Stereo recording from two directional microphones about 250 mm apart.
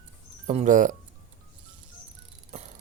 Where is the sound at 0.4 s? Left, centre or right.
Right.